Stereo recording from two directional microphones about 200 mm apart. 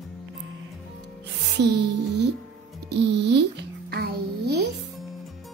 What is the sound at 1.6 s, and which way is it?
Music, 55° right (ahead or behind).